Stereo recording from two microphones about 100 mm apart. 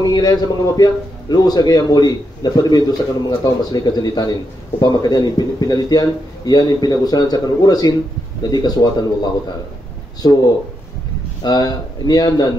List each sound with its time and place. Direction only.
0.0 s a man's voice: 40° left (ahead or behind)
11.4 s speech: 45° left (ahead or behind)